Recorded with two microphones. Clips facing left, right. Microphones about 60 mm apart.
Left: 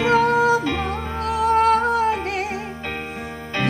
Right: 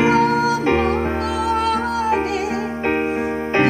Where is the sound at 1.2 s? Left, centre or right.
Right.